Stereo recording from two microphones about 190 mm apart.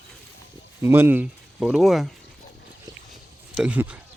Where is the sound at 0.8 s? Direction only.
10° right (ahead or behind).